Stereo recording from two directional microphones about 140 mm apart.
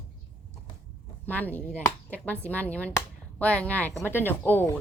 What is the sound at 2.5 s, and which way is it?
Speech, 10° left (ahead or behind).